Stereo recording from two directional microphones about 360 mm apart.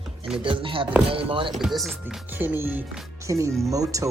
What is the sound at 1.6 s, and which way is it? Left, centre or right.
Speech, centre.